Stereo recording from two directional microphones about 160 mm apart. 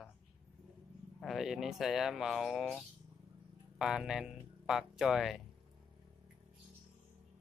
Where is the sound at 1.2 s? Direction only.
Centre (ahead or behind).